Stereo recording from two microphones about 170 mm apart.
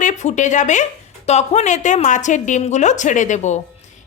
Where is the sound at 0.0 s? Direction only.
45° left (ahead or behind).